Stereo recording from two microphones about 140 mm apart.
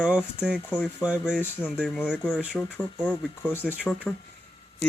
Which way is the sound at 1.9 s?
10° left (ahead or behind).